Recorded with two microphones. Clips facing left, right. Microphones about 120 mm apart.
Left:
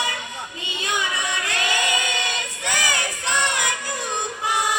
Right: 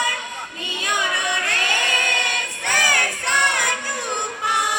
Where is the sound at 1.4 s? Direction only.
15° left (ahead or behind).